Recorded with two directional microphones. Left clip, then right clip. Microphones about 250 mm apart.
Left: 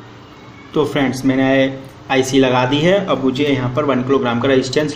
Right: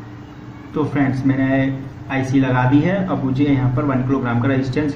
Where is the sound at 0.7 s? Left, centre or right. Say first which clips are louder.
Left 4 dB; left.